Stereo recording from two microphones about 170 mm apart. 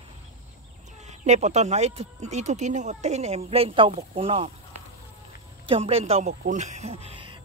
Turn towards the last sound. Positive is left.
turn(degrees=-30)  # may be behind; listen again after turning